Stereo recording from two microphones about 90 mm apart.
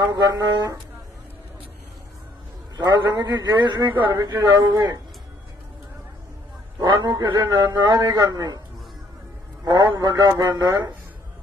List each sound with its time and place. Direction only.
0.1 s a man's voice: 50° right (ahead or behind)
2.8 s a man's voice: 50° right (ahead or behind)
4.2 s a man's voice: 45° right (ahead or behind)
6.8 s a man's voice: 50° right (ahead or behind)
9.7 s a man's voice: 45° right (ahead or behind)